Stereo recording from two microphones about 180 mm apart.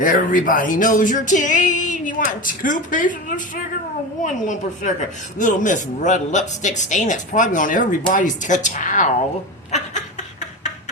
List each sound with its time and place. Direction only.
0.0 s speech: 50° left (ahead or behind)